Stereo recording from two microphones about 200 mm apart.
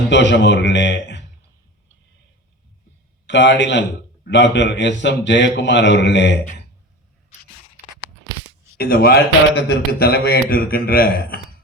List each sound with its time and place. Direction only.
0.1 s a man's voice: 60° left (ahead or behind)
3.2 s a man's voice: 60° left (ahead or behind)
8.8 s a man's voice: 50° left (ahead or behind)